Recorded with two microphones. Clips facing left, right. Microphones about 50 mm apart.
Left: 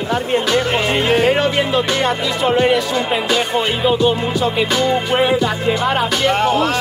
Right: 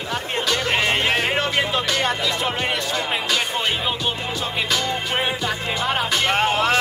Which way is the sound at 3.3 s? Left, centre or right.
Centre.